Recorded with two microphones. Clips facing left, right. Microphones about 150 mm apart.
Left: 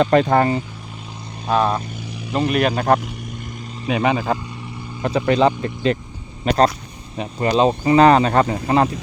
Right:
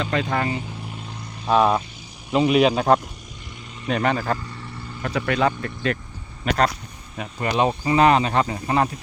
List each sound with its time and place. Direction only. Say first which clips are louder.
0.0 s speech: left 9 dB; 45° left (ahead or behind)
1.5 s speech: right 1 dB; 10° right (ahead or behind)
3.8 s speech: left 3 dB; 10° left (ahead or behind); by 8.6 s 45° left (ahead or behind)
8.6 s speech: left 4 dB; 30° left (ahead or behind)